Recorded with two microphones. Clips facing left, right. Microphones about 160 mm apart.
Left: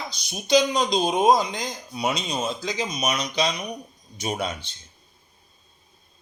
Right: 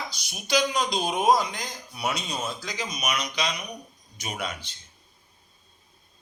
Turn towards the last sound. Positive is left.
turn(degrees=25)  # may be behind; listen again after turning